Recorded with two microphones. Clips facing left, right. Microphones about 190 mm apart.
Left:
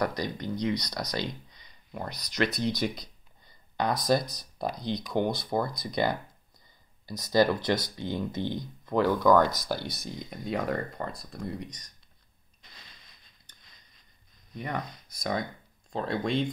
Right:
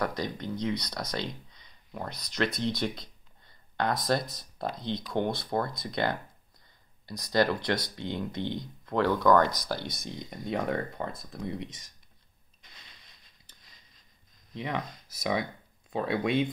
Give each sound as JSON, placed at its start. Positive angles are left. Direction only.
{"t": 0.0, "sound": "speech", "side_deg": 0}
{"t": 1.1, "sound": "a sound", "side_deg": 5}
{"t": 4.1, "sound": "speech", "side_deg": 0}
{"t": 4.7, "sound": "speech", "side_deg": -25}
{"t": 5.1, "sound": "speech", "side_deg": 0}
{"t": 7.8, "sound": "speech", "side_deg": -20}
{"t": 8.8, "sound": "speech", "side_deg": 5}
{"t": 11.5, "sound": "speech", "side_deg": -25}
{"t": 14.6, "sound": "speech", "side_deg": 0}